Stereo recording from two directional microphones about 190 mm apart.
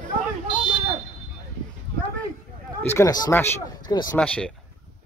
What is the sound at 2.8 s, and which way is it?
Speech, 15° left (ahead or behind).